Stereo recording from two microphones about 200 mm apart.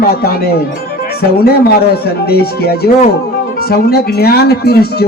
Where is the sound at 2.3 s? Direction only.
50° left (ahead or behind).